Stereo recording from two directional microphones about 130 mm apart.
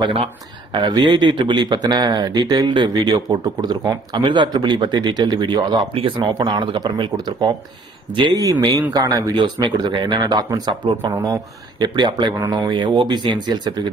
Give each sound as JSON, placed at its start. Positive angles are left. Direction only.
{"t": 0.0, "sound": "speech", "side_deg": -45}
{"t": 0.7, "sound": "speech", "side_deg": -35}